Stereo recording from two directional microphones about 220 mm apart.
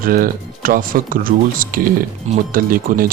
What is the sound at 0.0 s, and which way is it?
Speech, 40° right (ahead or behind).